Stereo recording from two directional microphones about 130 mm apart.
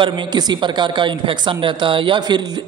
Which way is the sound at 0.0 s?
35° right (ahead or behind).